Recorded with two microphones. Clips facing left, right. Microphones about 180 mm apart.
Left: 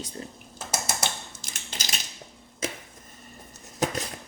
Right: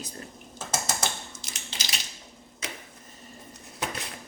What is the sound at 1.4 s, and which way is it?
Crushing, 45° left (ahead or behind).